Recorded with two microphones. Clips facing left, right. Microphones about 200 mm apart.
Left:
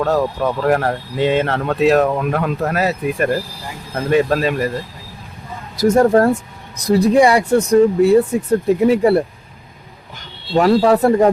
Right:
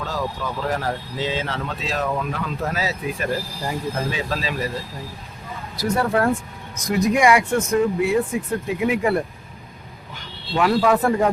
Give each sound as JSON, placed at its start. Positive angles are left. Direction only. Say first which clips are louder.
{"t": 0.0, "sound": "speech", "louder": "left 10 dB", "side_deg": 65}
{"t": 5.7, "sound": "speech", "louder": "left 9 dB", "side_deg": 45}
{"t": 10.6, "sound": "speech", "louder": "left 6 dB", "side_deg": 35}